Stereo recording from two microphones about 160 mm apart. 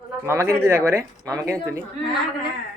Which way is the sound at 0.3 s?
15° right (ahead or behind).